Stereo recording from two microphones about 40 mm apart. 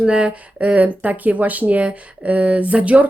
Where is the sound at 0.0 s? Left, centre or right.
Right.